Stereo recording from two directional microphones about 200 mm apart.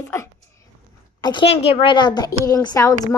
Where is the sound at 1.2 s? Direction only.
25° left (ahead or behind).